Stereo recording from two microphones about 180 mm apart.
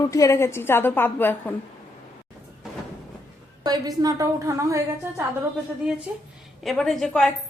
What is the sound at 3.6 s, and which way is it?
A woman's voice, 20° right (ahead or behind).